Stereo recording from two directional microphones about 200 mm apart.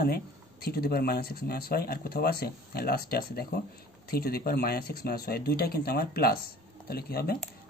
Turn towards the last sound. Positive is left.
turn(degrees=50)  # may be behind; listen again after turning